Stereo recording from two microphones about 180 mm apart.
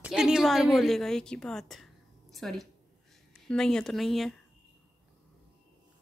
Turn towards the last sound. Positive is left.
turn(degrees=0)  # may be behind; listen again after turning